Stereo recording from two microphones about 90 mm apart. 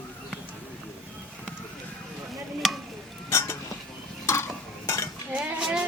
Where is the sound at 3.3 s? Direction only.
35° left (ahead or behind).